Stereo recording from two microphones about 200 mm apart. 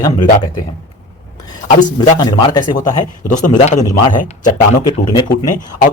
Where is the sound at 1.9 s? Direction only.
20° left (ahead or behind).